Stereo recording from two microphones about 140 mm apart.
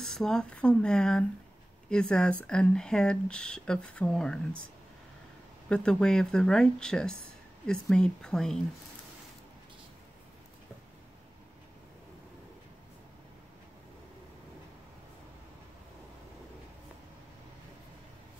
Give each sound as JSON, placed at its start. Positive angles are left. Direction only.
{"t": 0.0, "sound": "speech", "side_deg": 5}
{"t": 5.7, "sound": "speech", "side_deg": 5}